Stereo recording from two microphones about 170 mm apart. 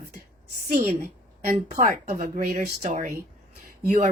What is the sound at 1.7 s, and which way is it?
Speech, 50° right (ahead or behind).